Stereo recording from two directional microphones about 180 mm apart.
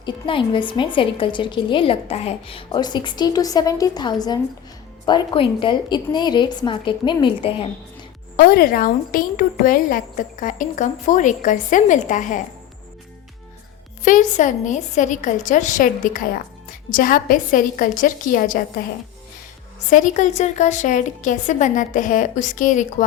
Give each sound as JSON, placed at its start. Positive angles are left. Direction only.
{"t": 0.0, "sound": "a woman's voice", "side_deg": 30}
{"t": 8.4, "sound": "a woman's voice", "side_deg": 55}
{"t": 14.0, "sound": "a woman's voice", "side_deg": 45}
{"t": 19.9, "sound": "a woman's voice", "side_deg": 45}